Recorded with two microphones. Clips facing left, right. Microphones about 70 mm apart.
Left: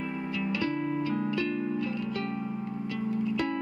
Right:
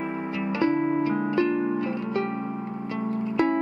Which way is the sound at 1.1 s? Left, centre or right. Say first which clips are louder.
Right 6 dB; right.